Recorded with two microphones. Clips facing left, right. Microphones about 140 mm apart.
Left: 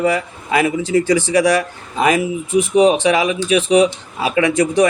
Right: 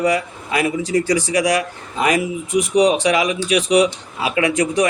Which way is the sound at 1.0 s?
25° left (ahead or behind).